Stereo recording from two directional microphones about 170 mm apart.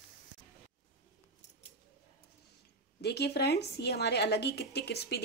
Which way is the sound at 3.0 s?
75° left (ahead or behind).